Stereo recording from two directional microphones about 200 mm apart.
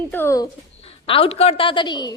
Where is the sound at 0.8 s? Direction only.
30° left (ahead or behind).